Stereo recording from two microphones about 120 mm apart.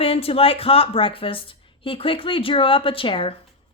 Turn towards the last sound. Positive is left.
turn(degrees=45)  # may be behind; listen again after turning